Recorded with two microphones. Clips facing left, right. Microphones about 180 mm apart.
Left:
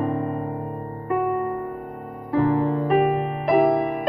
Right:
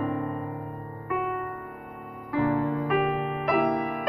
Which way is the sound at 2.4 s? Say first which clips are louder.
Left 4 dB; 35° left (ahead or behind).